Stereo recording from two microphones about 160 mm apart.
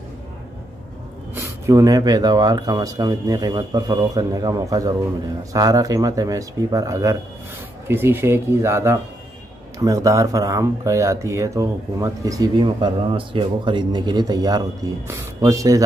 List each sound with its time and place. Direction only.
1.3 s speech: 15° right (ahead or behind)